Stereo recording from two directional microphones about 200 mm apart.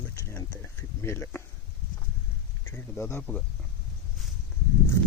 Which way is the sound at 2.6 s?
10° left (ahead or behind).